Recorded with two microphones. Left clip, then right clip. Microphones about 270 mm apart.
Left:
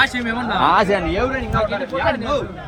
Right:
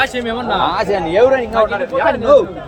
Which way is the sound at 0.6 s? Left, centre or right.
Left.